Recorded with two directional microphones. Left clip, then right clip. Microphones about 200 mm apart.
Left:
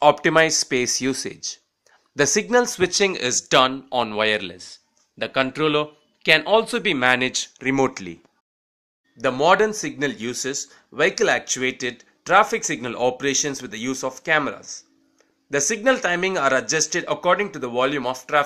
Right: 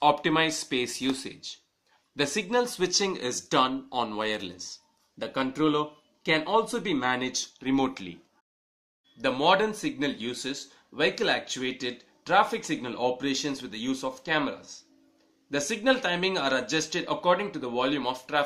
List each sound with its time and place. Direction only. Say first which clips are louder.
0.0 s speech: left 7 dB; 40° left (ahead or behind)
9.2 s speech: left 6 dB; 45° left (ahead or behind)
15.7 s speech: left 5 dB; 45° left (ahead or behind)